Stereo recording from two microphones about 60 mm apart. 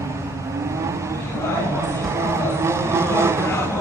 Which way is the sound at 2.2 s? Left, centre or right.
Right.